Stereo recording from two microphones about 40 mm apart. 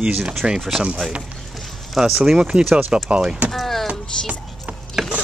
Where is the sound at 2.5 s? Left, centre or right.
Right.